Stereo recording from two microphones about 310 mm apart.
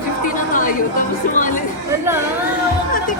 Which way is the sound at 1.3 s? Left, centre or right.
Left.